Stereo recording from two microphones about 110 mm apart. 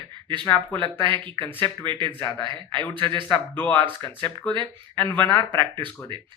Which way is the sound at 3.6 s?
15° left (ahead or behind).